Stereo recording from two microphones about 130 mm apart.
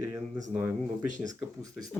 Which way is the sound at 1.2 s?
30° right (ahead or behind).